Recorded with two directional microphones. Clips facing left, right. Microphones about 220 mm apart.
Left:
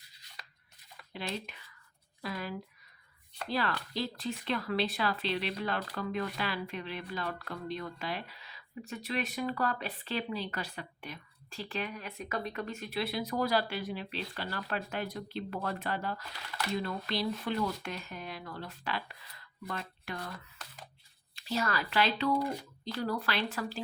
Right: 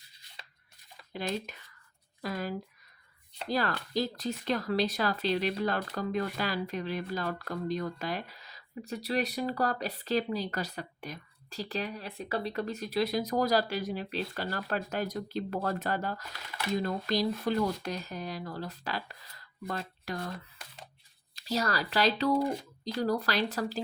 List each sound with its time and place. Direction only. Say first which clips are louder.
0.4 s a sound: right 1 dB; 25° right (ahead or behind)
1.1 s speech: right 4 dB; 45° right (ahead or behind)
21.3 s speech: right 2 dB; 40° right (ahead or behind)